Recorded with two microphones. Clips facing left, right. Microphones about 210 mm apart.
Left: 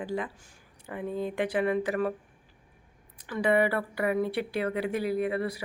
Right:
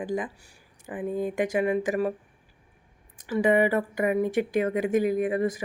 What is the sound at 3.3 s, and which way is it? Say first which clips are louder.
Speech: right 3 dB; 15° right (ahead or behind).